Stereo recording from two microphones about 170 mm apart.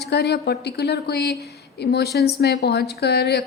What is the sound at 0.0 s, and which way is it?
A woman's voice, 80° left.